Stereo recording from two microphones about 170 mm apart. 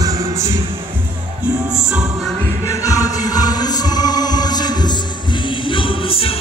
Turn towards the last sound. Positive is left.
turn(degrees=35)  # may be behind; listen again after turning